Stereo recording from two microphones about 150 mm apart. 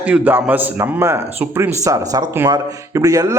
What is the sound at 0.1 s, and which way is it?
A man's voice, 10° right (ahead or behind).